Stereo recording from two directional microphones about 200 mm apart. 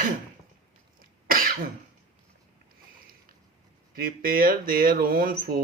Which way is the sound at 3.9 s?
45° right (ahead or behind).